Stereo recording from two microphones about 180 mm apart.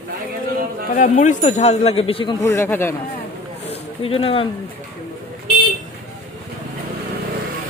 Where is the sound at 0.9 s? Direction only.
45° left (ahead or behind); by 2.9 s 15° left (ahead or behind).